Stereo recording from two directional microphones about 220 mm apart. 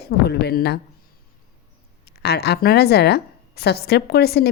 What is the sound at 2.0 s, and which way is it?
A woman's voice, 45° left (ahead or behind).